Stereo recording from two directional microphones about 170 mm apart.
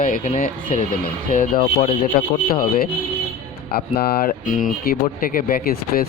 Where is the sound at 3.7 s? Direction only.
65° left (ahead or behind).